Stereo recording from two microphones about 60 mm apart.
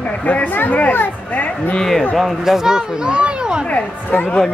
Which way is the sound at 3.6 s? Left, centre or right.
Left.